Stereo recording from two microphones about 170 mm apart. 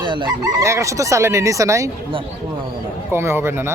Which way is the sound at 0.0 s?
30° right (ahead or behind).